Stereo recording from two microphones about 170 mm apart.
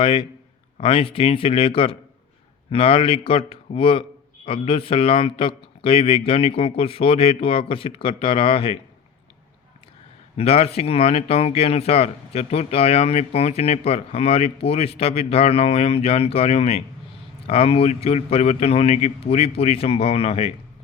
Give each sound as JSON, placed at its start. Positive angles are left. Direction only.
{"t": 0.0, "sound": "speech", "side_deg": 30}
{"t": 10.3, "sound": "speech", "side_deg": 35}